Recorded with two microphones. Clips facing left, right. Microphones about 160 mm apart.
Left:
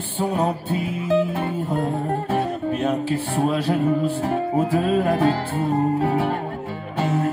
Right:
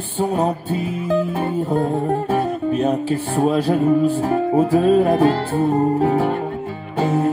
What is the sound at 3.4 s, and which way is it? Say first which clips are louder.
Music: right 4 dB; 40° right (ahead or behind).